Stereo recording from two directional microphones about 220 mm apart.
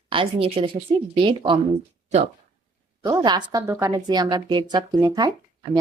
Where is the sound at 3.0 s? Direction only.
20° right (ahead or behind).